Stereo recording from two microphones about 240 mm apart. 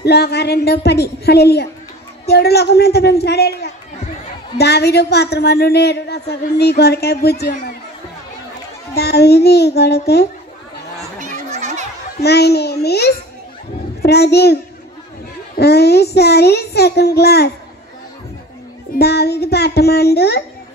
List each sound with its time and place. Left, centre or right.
0.0 s a woman's voice: left
8.9 s a woman's voice: left
11.5 s a sound: right
12.2 s a woman's voice: left
18.9 s a woman's voice: left